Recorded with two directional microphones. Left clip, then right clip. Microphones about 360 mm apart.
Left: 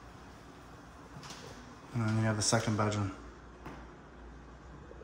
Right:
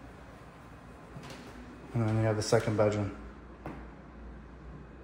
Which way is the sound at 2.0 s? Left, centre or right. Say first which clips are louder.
Right 3 dB; centre.